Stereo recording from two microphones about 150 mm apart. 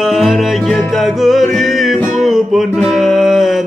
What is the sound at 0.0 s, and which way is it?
Music, centre (ahead or behind).